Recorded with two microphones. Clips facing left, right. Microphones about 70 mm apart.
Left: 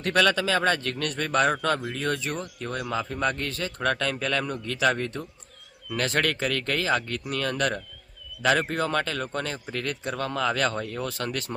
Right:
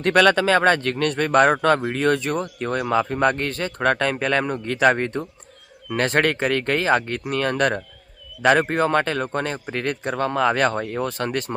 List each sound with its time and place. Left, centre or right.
0.0 s speech: right